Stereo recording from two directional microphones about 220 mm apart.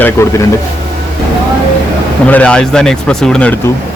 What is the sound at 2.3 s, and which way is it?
Speech, 5° left (ahead or behind).